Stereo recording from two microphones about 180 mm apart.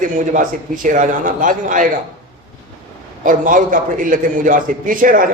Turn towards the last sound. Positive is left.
turn(degrees=-50)  # may be behind; listen again after turning